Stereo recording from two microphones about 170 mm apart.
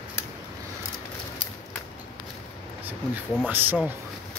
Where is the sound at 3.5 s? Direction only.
10° right (ahead or behind).